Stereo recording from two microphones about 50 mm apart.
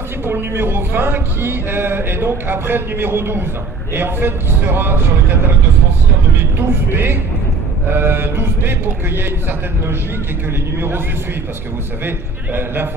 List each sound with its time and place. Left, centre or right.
0.2 s a man's voice: right
6.9 s a man's voice: right